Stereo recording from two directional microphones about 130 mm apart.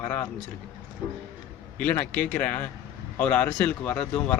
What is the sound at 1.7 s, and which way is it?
Speech, 10° left (ahead or behind).